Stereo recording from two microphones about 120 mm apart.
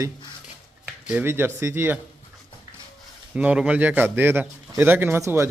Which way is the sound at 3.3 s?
10° right (ahead or behind).